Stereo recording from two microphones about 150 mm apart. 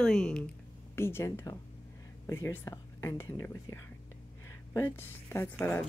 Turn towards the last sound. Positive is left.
turn(degrees=10)  # may be behind; listen again after turning